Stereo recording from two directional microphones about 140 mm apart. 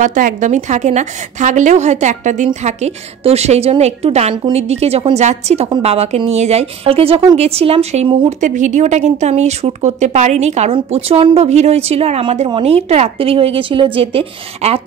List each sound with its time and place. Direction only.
0.0 s a woman's voice: 65° right (ahead or behind); by 8.3 s 40° right (ahead or behind)
8.3 s speech: 60° right (ahead or behind); by 14.8 s 45° right (ahead or behind)